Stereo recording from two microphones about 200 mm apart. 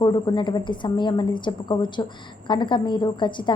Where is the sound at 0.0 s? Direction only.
20° left (ahead or behind).